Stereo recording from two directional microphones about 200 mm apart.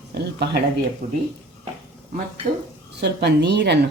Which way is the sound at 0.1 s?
55° right (ahead or behind).